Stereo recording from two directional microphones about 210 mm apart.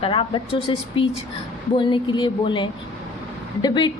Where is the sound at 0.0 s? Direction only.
25° left (ahead or behind).